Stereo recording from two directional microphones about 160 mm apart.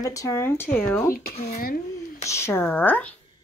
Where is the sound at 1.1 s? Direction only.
65° left (ahead or behind).